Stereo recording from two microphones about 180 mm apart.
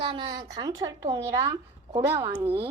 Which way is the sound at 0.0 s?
30° right (ahead or behind).